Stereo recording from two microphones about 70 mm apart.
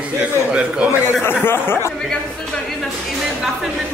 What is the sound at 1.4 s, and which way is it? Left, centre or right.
Speech, left.